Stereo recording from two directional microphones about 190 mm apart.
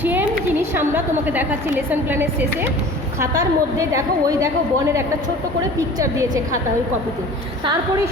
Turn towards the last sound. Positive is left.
turn(degrees=-20)  # may be behind; listen again after turning